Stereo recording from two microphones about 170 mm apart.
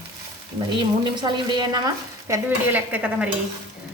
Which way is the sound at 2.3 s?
10° right (ahead or behind).